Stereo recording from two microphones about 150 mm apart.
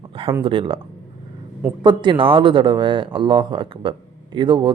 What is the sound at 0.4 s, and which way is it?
Speech, 35° right (ahead or behind).